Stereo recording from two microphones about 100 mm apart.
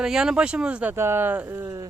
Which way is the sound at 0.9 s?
25° right (ahead or behind).